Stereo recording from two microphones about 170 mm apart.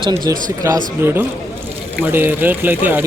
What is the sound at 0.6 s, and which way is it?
Speech, 15° right (ahead or behind).